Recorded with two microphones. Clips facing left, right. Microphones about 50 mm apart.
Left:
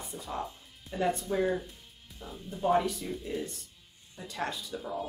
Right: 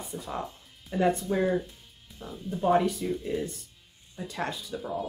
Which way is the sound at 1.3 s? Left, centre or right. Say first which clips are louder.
Right 3 dB; centre.